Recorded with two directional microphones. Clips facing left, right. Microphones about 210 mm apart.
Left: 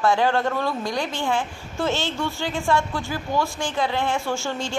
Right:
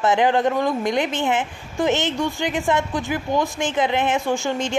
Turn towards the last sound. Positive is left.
turn(degrees=-15)  # may be behind; listen again after turning